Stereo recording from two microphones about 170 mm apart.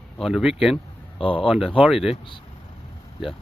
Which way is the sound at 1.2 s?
30° left (ahead or behind).